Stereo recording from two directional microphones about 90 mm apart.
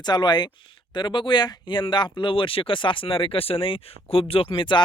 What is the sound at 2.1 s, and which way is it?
Speech, 70° left (ahead or behind).